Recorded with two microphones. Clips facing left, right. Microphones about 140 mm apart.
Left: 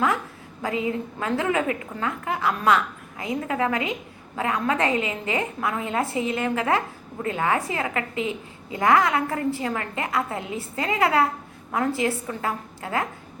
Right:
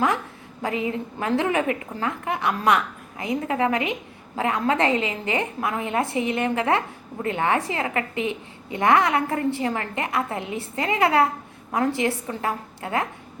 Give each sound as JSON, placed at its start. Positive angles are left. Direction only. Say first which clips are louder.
{"t": 0.8, "sound": "a woman's voice", "louder": "even", "side_deg": -25}